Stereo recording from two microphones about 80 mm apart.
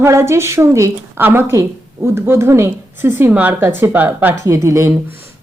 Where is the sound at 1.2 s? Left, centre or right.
Right.